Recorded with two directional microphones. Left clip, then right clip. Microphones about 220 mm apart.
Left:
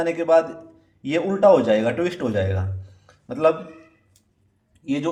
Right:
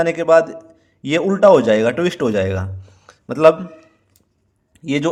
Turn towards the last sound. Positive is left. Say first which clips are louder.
# right 6 dB
turn(degrees=-45)  # may be behind; listen again after turning